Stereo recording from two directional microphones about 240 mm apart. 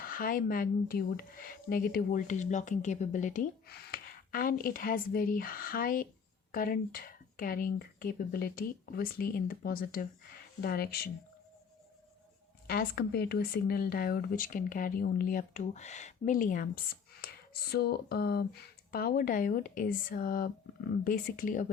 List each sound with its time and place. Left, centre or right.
0.0 s speech: left
12.6 s speech: left